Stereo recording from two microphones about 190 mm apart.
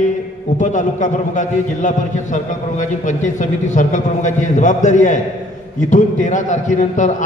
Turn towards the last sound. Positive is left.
turn(degrees=40)  # may be behind; listen again after turning